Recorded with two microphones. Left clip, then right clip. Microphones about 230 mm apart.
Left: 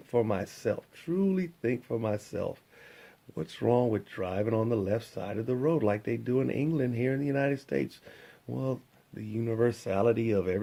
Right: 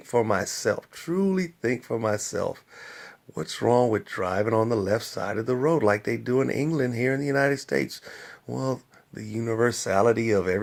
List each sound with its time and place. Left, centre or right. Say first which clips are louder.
0.1 s speech: right 5 dB; centre